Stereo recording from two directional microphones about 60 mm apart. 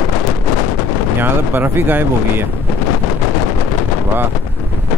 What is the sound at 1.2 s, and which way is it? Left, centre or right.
Speech, right.